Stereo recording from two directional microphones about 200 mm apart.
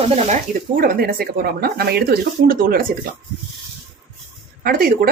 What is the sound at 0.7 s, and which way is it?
Speech, 45° right (ahead or behind).